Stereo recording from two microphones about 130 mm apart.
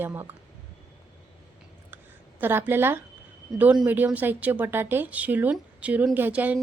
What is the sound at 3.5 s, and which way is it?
A woman's voice, 10° right (ahead or behind).